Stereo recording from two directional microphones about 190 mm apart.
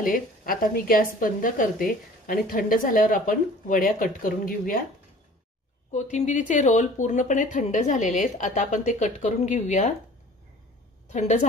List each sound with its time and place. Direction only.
0.0 s a woman's voice: 45° left (ahead or behind)
5.9 s speech: 40° left (ahead or behind)
11.1 s a woman's voice: 40° left (ahead or behind)